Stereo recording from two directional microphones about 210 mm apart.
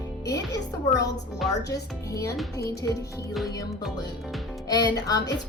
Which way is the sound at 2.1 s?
15° left (ahead or behind).